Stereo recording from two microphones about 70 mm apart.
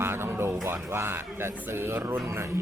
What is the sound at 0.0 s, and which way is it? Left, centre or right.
A man's voice, right.